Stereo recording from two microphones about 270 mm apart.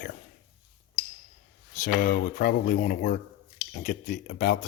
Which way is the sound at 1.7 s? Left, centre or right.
Left.